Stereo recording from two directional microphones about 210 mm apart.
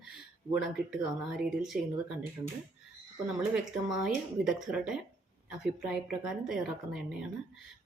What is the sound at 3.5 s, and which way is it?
A woman's voice, 5° right (ahead or behind).